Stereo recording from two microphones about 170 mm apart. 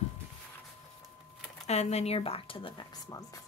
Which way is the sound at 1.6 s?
40° left (ahead or behind).